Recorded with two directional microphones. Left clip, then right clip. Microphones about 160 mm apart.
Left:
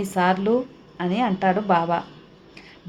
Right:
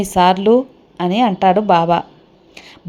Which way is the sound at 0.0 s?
35° right (ahead or behind).